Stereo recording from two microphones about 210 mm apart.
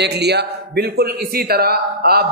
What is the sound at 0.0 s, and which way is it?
A man's voice, 50° right (ahead or behind).